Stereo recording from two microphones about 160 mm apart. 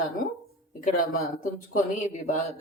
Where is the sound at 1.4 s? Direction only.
50° left (ahead or behind).